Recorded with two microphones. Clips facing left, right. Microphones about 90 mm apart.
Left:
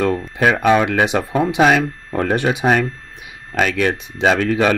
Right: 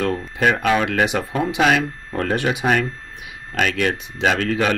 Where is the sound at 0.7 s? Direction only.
25° left (ahead or behind).